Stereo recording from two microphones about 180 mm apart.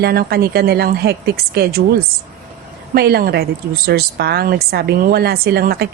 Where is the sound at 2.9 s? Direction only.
60° right (ahead or behind).